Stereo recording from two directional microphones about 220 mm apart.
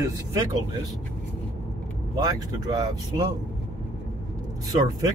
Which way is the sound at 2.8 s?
20° right (ahead or behind).